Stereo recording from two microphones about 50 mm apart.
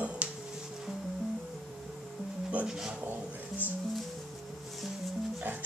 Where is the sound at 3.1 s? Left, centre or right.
Right.